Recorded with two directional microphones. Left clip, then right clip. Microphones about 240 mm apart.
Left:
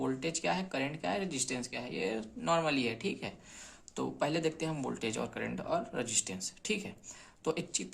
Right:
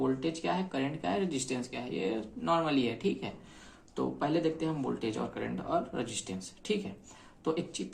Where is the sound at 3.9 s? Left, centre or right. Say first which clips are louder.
Right 2 dB; left.